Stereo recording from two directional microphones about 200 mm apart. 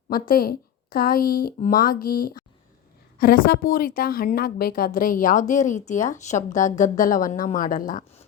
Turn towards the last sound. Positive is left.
turn(degrees=40)  # may be behind; listen again after turning